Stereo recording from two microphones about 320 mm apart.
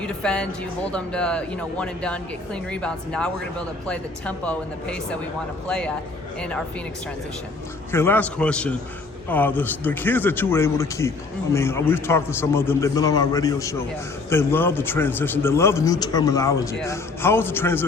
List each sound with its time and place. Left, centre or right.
0.0 s speech: centre
7.9 s a man's voice: centre